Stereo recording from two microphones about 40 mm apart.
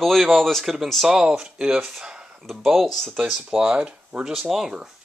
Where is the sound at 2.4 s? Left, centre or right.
Centre.